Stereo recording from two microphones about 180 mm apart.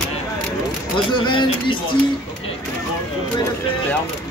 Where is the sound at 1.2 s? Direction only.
25° left (ahead or behind).